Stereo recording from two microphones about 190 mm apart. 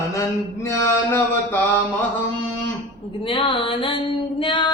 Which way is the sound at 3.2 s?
25° left (ahead or behind).